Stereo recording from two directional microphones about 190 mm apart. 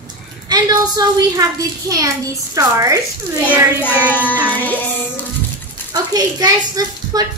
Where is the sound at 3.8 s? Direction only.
10° left (ahead or behind).